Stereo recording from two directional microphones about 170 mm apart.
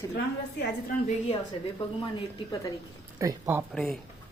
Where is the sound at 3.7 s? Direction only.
5° left (ahead or behind).